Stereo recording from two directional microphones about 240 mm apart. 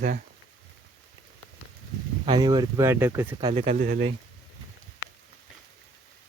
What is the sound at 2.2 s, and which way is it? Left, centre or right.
Speech, centre.